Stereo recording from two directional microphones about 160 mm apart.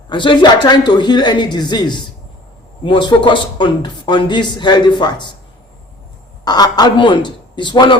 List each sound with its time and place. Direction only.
0.1 s speech: 30° left (ahead or behind)
6.4 s speech: 25° left (ahead or behind)